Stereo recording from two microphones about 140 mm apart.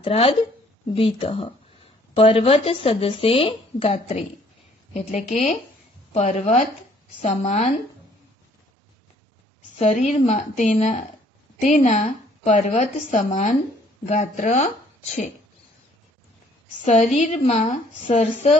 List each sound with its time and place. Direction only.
0.0 s a woman's voice: 40° left (ahead or behind)
9.8 s a woman's voice: 55° left (ahead or behind)
16.8 s a woman's voice: 55° left (ahead or behind)